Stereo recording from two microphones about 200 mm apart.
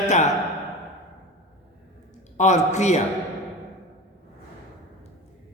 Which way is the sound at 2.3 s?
35° left (ahead or behind).